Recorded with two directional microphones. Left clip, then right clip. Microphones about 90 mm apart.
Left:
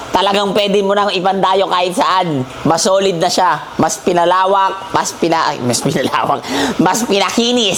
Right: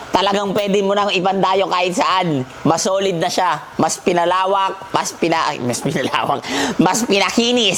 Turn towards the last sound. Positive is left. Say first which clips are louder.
# left 2 dB
turn(degrees=-35)  # may be behind; listen again after turning